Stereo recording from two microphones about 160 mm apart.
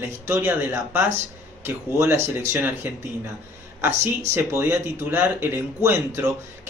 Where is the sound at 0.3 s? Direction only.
15° right (ahead or behind).